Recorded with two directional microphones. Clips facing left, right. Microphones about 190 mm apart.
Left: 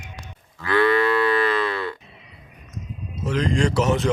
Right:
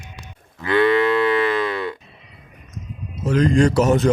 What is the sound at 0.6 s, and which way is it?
Cattle, 20° right (ahead or behind).